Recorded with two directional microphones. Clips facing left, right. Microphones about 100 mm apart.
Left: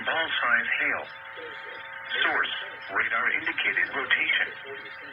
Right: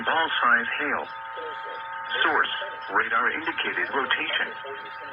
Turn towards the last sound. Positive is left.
turn(degrees=-40)  # may be behind; listen again after turning